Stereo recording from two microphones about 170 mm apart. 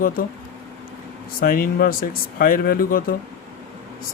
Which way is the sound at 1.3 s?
60° left (ahead or behind).